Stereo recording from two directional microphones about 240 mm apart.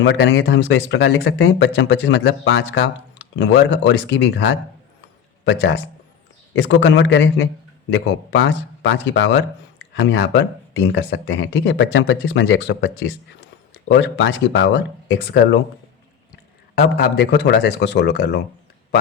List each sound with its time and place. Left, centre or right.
0.0 s speech: left
6.5 s speech: left